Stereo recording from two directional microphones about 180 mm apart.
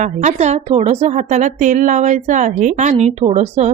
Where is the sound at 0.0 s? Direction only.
40° right (ahead or behind).